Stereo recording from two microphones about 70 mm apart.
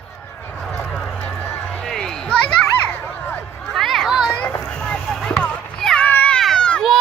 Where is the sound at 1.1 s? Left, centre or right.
Centre.